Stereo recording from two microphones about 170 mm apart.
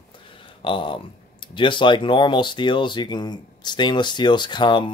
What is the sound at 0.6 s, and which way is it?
Speech, 30° left (ahead or behind).